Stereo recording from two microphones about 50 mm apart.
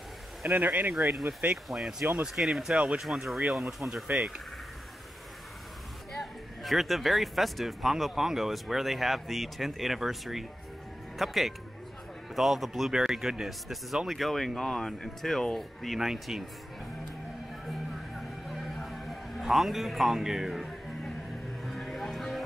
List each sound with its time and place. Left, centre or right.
0.4 s speech: right
0.9 s speech: centre
6.6 s speech: centre
16.1 s speech: centre
17.6 s music: centre
21.6 s vehicle: centre